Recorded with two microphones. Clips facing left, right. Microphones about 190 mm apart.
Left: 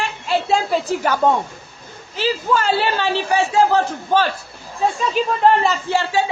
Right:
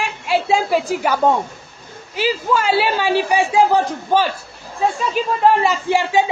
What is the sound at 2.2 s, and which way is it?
A man's voice, 10° right (ahead or behind).